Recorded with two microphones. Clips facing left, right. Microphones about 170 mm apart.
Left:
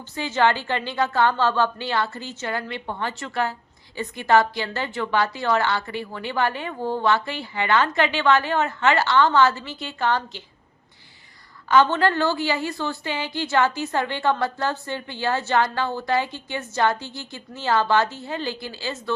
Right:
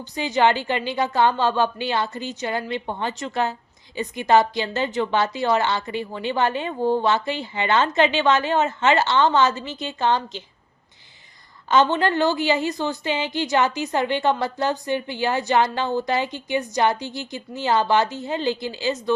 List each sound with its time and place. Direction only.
0.0 s a woman's voice: 15° right (ahead or behind)
11.7 s a woman's voice: 20° right (ahead or behind)